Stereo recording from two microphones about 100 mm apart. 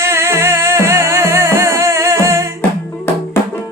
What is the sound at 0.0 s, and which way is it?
Music, 25° right (ahead or behind).